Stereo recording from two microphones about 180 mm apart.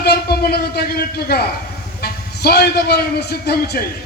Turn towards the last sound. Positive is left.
turn(degrees=60)  # may be behind; listen again after turning